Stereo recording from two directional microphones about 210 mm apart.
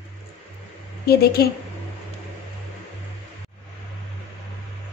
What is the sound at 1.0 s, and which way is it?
Speech, 50° left (ahead or behind).